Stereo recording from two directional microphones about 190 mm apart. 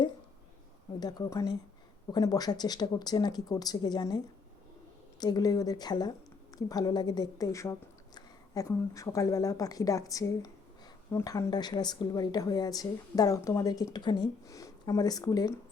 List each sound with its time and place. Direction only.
0.9 s speech: 20° left (ahead or behind)
5.2 s a woman's voice: 20° left (ahead or behind)